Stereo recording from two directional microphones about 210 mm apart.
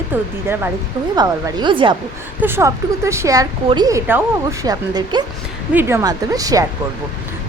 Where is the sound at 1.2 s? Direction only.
20° right (ahead or behind).